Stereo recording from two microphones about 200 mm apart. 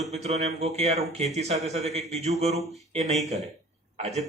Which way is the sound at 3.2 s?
30° right (ahead or behind).